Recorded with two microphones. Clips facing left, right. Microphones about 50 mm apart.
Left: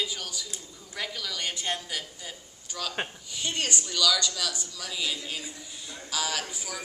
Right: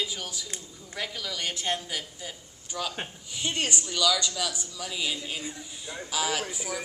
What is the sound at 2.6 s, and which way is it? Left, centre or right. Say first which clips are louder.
A woman's voice: even; centre.